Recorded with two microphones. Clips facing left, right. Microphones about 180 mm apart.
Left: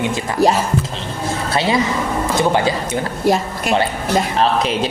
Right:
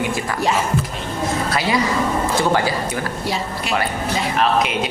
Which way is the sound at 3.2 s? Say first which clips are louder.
Left 7 dB; 50° left (ahead or behind).